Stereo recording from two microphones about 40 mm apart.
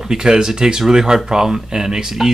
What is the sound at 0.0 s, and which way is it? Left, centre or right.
Speech, centre.